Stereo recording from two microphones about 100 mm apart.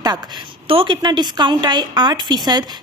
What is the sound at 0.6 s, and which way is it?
Speech, 65° right (ahead or behind).